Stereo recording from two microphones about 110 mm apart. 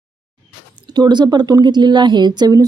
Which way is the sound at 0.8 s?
40° right (ahead or behind).